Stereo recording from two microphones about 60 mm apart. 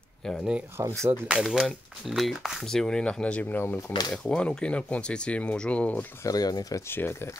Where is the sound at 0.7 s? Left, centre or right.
Right.